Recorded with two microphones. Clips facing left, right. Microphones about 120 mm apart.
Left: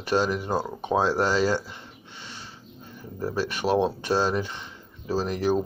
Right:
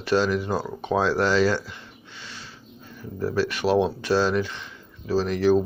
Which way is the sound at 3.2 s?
20° left (ahead or behind).